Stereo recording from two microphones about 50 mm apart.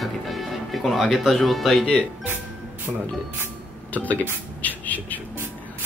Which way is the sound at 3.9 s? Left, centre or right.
Left.